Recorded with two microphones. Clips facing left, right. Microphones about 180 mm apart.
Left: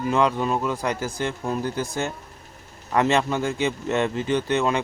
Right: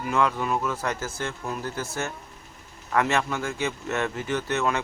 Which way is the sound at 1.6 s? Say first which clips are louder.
Left 4 dB; 15° left (ahead or behind).